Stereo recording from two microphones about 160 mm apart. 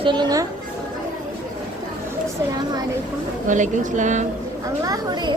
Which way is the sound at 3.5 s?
50° right (ahead or behind).